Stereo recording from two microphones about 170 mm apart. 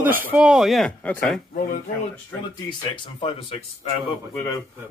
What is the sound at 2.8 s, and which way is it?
Speech, 30° left (ahead or behind).